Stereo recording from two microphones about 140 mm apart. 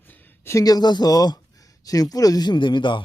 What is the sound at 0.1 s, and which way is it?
Speech, 20° left (ahead or behind).